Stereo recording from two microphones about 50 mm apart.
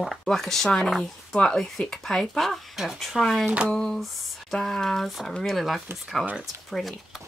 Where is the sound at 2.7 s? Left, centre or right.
Centre.